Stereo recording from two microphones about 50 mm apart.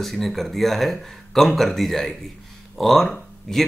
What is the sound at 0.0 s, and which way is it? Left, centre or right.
Speech, centre.